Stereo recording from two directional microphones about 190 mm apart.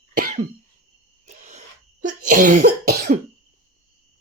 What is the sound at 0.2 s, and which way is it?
Cough, 45° right (ahead or behind).